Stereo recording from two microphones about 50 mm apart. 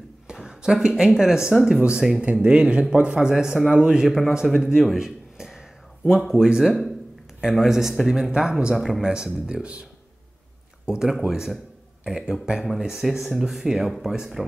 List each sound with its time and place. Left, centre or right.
0.3 s a sound: centre
0.7 s a man's voice: centre
4.6 s speech: centre
4.9 s a sound: centre
6.0 s speech: centre
8.7 s speech: centre
9.0 s a man's voice: centre
10.9 s speech: centre